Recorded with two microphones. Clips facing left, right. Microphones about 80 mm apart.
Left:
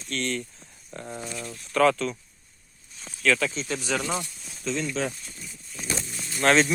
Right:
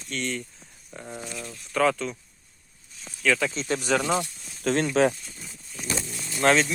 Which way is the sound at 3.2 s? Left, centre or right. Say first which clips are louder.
Even; centre.